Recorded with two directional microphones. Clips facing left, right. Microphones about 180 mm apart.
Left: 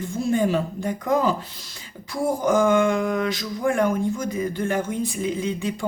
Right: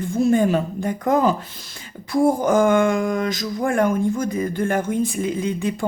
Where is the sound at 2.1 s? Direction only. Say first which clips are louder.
Right 4 dB; 55° right (ahead or behind).